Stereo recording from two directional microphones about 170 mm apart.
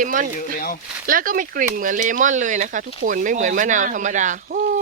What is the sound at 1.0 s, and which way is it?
Speech, 55° right (ahead or behind).